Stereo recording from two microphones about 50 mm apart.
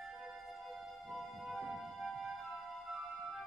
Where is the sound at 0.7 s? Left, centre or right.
Centre.